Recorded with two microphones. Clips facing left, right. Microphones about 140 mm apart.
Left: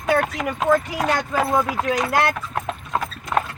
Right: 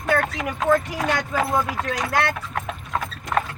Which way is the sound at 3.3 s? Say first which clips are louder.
Left 1 dB; 10° left (ahead or behind).